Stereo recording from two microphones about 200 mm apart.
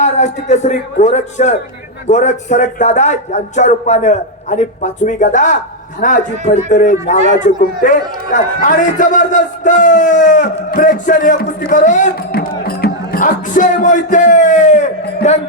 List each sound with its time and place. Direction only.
0.0 s speech: 35° left (ahead or behind)